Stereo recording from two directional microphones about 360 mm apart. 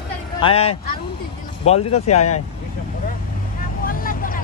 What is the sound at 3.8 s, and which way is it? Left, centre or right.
Vehicle, left.